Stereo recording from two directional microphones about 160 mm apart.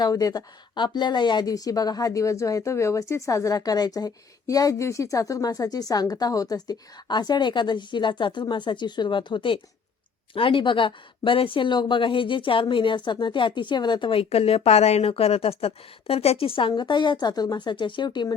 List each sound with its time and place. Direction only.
0.0 s speech: 20° left (ahead or behind)